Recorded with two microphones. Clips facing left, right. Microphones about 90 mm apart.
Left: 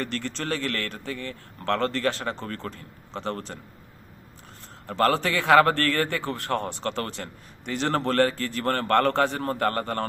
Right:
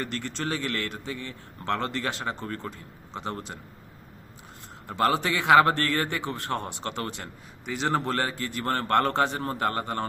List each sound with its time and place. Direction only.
0.0 s a man's voice: 15° right (ahead or behind)
4.9 s a man's voice: 15° right (ahead or behind)
7.6 s a man's voice: 5° right (ahead or behind); by 10.1 s 20° right (ahead or behind)